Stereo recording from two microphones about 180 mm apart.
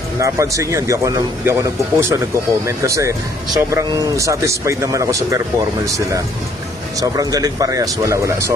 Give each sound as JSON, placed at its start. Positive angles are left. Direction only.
{"t": 0.2, "sound": "speech", "side_deg": -15}